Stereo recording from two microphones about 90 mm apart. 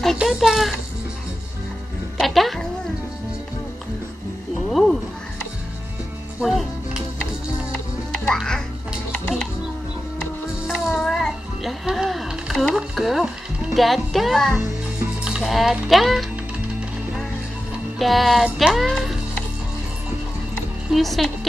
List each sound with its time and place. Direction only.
0.2 s speech: 5° right (ahead or behind)
2.1 s music: centre (ahead or behind)
4.6 s a sound: 5° left (ahead or behind)
6.4 s chopping: 5° right (ahead or behind)
10.7 s music: centre (ahead or behind)
11.8 s a sound: 5° right (ahead or behind)
13.7 s speech: centre (ahead or behind)
17.9 s speech: centre (ahead or behind)
20.9 s speech: centre (ahead or behind)